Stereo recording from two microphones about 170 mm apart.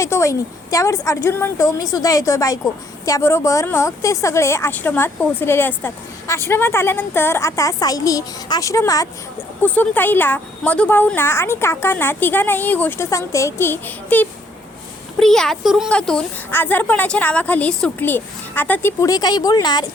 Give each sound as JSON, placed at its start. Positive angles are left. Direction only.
{"t": 0.0, "sound": "a woman's voice", "side_deg": 15}
{"t": 9.6, "sound": "a woman's voice", "side_deg": 10}